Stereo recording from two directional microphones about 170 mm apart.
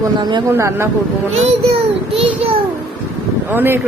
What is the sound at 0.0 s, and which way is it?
Speech, 25° right (ahead or behind).